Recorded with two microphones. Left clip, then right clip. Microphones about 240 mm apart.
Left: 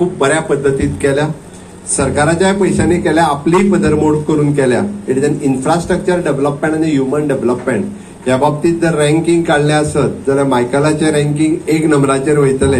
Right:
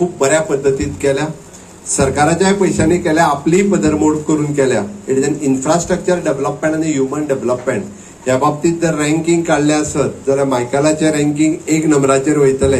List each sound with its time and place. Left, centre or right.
0.2 s speech: right